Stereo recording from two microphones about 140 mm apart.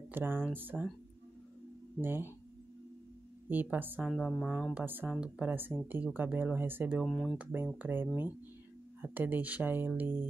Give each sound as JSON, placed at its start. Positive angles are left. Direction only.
{"t": 0.1, "sound": "speech", "side_deg": -15}
{"t": 2.0, "sound": "speech", "side_deg": -15}
{"t": 3.4, "sound": "speech", "side_deg": -15}
{"t": 4.0, "sound": "a woman's voice", "side_deg": 5}
{"t": 4.7, "sound": "speech", "side_deg": -15}
{"t": 7.0, "sound": "a woman's voice", "side_deg": 5}
{"t": 7.8, "sound": "speech", "side_deg": -15}